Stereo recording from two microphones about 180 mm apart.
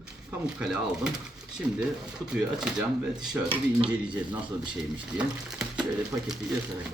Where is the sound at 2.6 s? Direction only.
5° right (ahead or behind).